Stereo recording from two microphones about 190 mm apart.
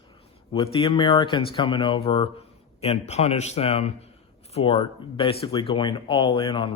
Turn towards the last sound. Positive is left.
turn(degrees=25)  # may be behind; listen again after turning